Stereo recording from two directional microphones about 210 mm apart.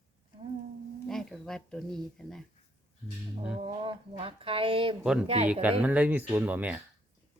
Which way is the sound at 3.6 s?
25° right (ahead or behind).